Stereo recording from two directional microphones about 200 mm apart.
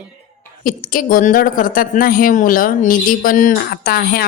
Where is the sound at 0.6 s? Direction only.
45° left (ahead or behind).